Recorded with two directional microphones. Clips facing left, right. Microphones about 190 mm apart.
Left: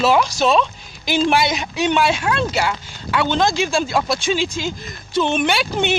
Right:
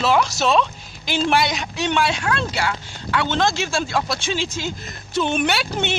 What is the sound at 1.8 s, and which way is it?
Speech, 15° left (ahead or behind).